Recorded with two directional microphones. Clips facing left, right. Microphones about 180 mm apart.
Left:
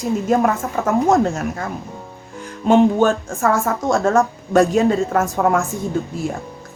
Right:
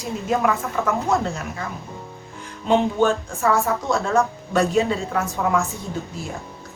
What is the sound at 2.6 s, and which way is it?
Speech, 50° left (ahead or behind).